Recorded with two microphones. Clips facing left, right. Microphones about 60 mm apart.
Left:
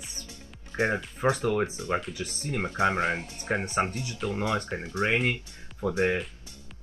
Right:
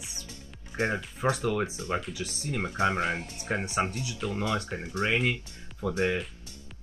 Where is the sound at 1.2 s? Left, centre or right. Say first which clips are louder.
Left 2 dB; left.